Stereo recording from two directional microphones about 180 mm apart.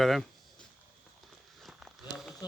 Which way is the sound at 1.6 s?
Centre (ahead or behind).